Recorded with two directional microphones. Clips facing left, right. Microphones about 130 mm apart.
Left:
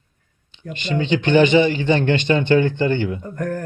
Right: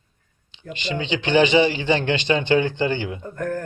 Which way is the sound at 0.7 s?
50° left (ahead or behind).